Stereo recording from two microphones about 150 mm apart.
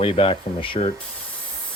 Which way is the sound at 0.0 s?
35° left (ahead or behind).